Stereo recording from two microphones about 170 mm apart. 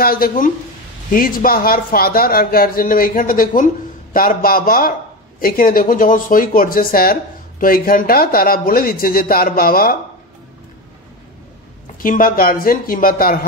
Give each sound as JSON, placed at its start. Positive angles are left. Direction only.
{"t": 0.0, "sound": "speech", "side_deg": 60}
{"t": 12.0, "sound": "speech", "side_deg": 55}